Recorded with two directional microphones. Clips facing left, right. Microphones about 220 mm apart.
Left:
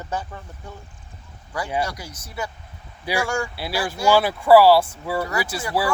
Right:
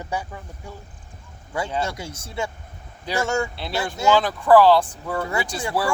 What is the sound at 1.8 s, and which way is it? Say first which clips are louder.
Speech: even; 25° right (ahead or behind).